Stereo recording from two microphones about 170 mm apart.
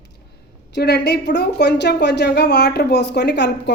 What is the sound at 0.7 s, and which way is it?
A woman's voice, 75° left (ahead or behind).